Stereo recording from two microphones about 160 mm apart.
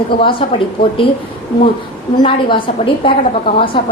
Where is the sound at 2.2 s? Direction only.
30° left (ahead or behind).